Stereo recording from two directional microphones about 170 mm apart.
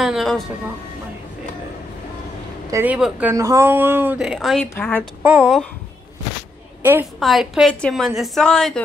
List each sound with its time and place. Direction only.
0.0 s a woman's voice: centre (ahead or behind)
2.7 s speech: 10° right (ahead or behind)
4.7 s a woman's voice: 10° left (ahead or behind)
5.2 s speech: 10° right (ahead or behind)
6.8 s a woman's voice: 10° right (ahead or behind)
7.2 s a woman's voice: centre (ahead or behind)